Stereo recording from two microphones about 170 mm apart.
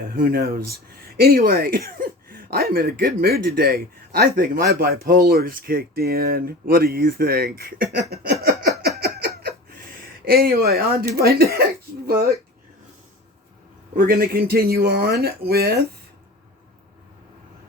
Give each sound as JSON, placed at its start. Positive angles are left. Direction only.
{"t": 0.1, "sound": "speech", "side_deg": -60}
{"t": 8.1, "sound": "a sound", "side_deg": -65}
{"t": 11.2, "sound": "speech", "side_deg": -65}
{"t": 13.9, "sound": "speech", "side_deg": -60}